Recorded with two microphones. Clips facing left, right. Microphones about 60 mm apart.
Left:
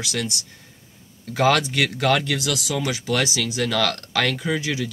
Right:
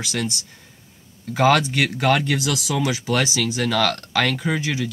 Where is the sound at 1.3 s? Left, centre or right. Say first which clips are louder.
Right 2 dB; centre.